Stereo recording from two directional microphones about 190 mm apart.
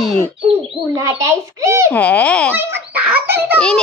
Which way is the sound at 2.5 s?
10° right (ahead or behind).